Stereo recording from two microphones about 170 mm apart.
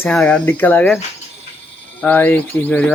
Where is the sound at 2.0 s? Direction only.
10° left (ahead or behind).